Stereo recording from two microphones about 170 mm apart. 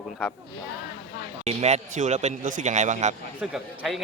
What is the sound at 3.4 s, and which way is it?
Speech, 5° right (ahead or behind).